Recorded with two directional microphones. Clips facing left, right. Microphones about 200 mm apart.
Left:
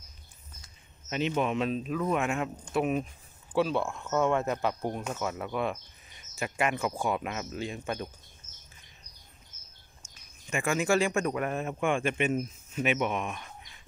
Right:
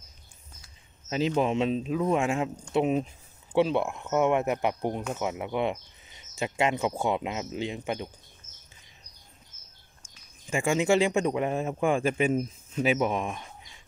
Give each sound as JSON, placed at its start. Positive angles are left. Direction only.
{"t": 1.1, "sound": "speech", "side_deg": -30}
{"t": 10.5, "sound": "a man's voice", "side_deg": -25}